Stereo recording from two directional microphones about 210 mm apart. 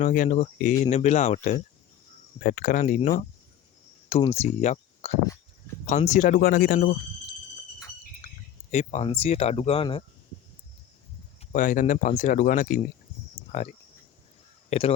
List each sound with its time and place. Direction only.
0.0 s speech: 35° left (ahead or behind)
8.7 s speech: 30° left (ahead or behind)
11.5 s speech: 40° left (ahead or behind)